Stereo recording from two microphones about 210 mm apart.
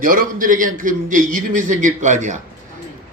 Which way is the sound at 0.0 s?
40° right (ahead or behind).